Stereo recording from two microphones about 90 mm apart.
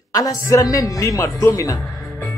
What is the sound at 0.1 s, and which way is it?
Speech, 40° left (ahead or behind).